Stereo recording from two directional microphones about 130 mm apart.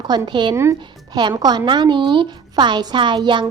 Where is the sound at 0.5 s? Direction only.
20° right (ahead or behind).